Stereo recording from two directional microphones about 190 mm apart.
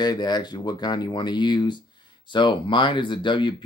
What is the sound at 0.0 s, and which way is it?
Speech, 20° left (ahead or behind).